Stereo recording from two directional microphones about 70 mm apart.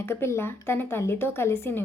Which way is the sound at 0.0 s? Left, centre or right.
Left.